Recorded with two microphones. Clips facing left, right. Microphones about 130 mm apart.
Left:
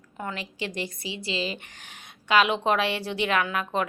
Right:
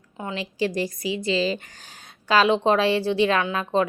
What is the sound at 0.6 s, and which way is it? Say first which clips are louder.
Speech: right 8 dB; 35° right (ahead or behind).